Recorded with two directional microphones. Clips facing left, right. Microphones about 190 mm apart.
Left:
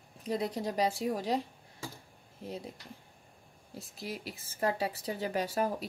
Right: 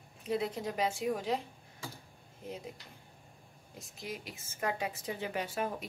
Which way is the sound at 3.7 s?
35° left (ahead or behind).